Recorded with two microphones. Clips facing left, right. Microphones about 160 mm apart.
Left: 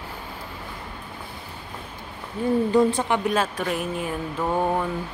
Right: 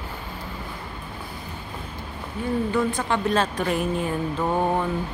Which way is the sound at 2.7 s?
35° left (ahead or behind).